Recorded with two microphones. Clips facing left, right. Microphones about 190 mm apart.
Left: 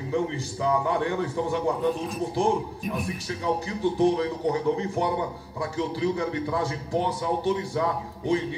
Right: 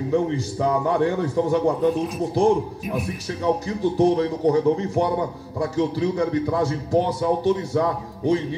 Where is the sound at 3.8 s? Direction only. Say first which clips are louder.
Right 3 dB; 45° right (ahead or behind).